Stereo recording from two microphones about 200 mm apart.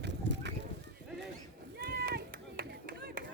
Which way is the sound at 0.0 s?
60° right (ahead or behind).